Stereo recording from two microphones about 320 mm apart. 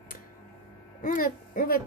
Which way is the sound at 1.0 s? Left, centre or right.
Left.